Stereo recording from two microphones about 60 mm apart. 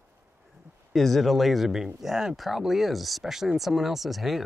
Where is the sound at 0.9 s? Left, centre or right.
Centre.